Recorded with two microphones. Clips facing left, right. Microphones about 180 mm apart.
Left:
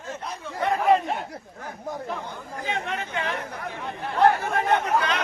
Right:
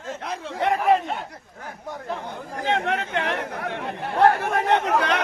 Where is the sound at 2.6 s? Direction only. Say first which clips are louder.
Right 6 dB; 75° right (ahead or behind).